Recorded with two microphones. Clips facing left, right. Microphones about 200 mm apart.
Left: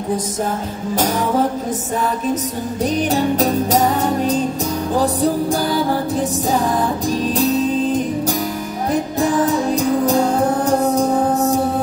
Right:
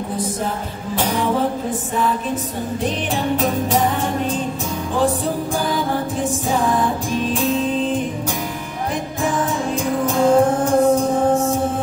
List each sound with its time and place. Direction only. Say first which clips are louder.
2.8 s music: left 6 dB; 40° left (ahead or behind)